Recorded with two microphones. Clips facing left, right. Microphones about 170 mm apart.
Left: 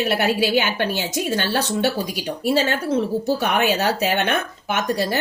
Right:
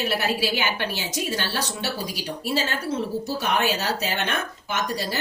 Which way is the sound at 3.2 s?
55° left (ahead or behind).